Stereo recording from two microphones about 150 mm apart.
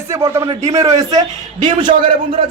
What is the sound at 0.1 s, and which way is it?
A man's voice, 20° right (ahead or behind).